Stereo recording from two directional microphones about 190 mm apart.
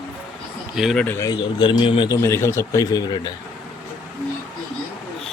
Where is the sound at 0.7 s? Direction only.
Centre (ahead or behind); by 3.3 s 20° left (ahead or behind).